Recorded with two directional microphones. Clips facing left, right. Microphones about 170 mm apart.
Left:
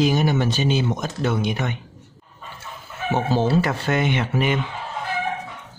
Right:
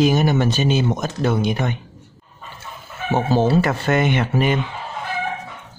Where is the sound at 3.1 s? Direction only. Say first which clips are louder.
Right 3 dB; 50° right (ahead or behind).